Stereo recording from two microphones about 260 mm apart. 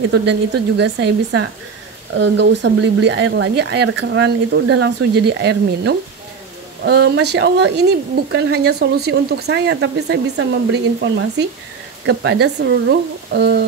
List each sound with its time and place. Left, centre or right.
0.1 s speech: right